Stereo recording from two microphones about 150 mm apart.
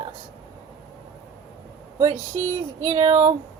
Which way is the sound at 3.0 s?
40° right (ahead or behind).